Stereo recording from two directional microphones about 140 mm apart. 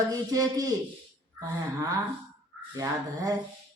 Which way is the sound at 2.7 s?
25° right (ahead or behind).